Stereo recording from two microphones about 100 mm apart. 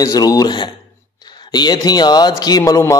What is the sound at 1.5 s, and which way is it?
A man's voice, 45° left (ahead or behind).